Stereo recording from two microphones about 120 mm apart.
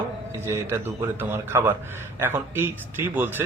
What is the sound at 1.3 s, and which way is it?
Speech, 20° right (ahead or behind).